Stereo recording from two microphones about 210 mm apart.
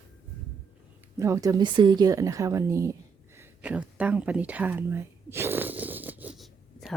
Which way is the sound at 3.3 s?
5° right (ahead or behind).